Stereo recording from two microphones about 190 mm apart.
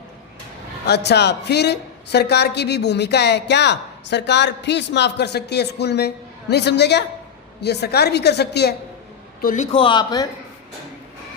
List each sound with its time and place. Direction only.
0.9 s a woman's voice: 60° left (ahead or behind)
9.4 s a man's voice: 45° left (ahead or behind)
9.7 s a man's voice: 25° left (ahead or behind)